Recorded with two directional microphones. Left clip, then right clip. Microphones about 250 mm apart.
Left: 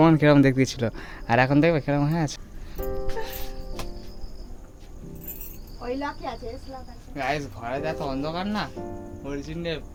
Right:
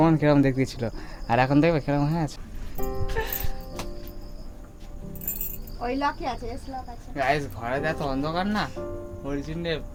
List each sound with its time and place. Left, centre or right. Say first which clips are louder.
0.0 s speech: left 3 dB; centre
5.8 s speech: right 3 dB; right
7.1 s speech: right 3 dB; centre